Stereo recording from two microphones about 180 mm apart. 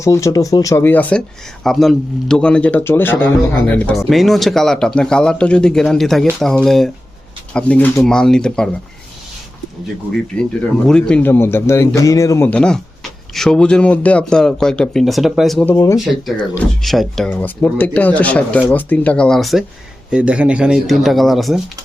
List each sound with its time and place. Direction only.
0.0 s a man's voice: 15° left (ahead or behind)
10.3 s a man's voice: 5° left (ahead or behind)
15.6 s speech: 15° left (ahead or behind)
16.8 s a man's voice: centre (ahead or behind)